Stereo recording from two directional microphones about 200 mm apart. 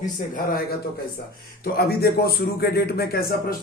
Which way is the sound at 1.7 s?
50° left (ahead or behind).